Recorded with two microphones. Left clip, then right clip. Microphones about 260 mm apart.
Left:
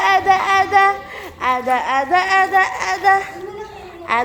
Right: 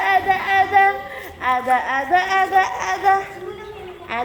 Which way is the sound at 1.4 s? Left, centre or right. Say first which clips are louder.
Left 1 dB; centre.